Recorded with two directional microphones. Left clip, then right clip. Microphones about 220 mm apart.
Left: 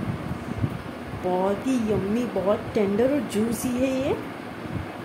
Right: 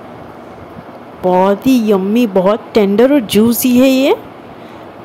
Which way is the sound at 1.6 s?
40° right (ahead or behind).